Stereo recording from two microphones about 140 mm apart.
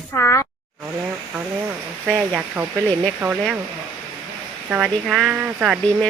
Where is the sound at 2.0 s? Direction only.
10° right (ahead or behind).